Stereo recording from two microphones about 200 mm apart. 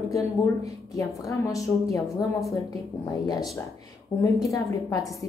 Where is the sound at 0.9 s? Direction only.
15° left (ahead or behind).